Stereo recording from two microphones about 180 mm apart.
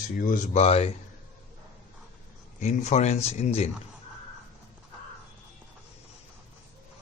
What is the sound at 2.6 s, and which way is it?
Speech, 40° left (ahead or behind).